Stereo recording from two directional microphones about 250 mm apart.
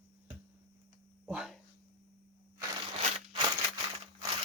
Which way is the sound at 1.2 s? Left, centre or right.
Centre.